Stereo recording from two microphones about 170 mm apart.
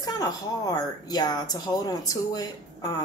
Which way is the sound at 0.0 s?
25° left (ahead or behind).